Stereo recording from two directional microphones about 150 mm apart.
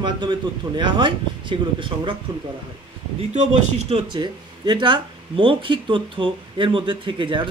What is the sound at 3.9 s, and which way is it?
Speech, 30° right (ahead or behind).